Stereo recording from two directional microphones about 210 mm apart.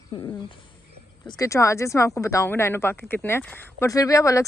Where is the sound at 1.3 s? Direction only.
15° left (ahead or behind).